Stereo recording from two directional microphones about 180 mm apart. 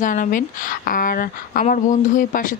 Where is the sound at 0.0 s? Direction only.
45° left (ahead or behind).